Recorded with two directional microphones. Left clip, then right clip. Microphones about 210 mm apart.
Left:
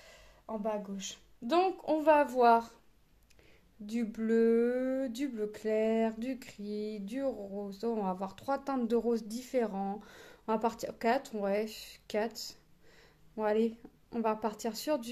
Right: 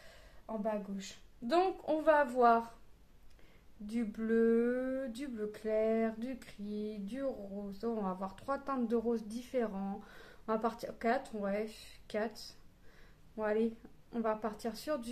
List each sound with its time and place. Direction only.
0.0 s a sound: 30° left (ahead or behind)
1.5 s speech: 25° left (ahead or behind)
3.8 s speech: 30° left (ahead or behind)